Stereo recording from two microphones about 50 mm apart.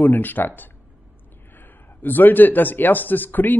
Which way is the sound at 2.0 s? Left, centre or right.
Left.